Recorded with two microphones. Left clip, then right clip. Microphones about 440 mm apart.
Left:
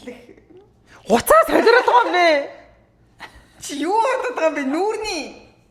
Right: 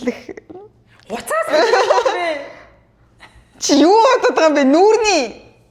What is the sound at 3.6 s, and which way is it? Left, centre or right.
Speech, right.